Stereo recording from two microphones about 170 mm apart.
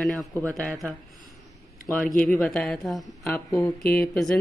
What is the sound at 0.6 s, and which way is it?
Speech, 5° left (ahead or behind).